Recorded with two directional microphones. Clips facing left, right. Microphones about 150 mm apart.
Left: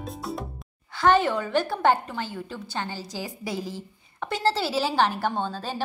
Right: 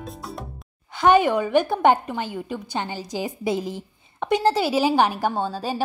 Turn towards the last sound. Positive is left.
turn(degrees=-10)  # may be behind; listen again after turning